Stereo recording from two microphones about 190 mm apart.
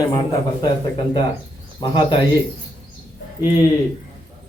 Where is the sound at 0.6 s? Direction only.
25° left (ahead or behind).